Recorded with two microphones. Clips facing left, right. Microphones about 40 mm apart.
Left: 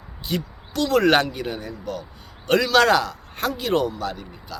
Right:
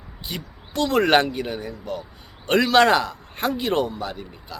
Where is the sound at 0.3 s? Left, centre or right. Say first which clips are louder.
Left 7 dB; centre.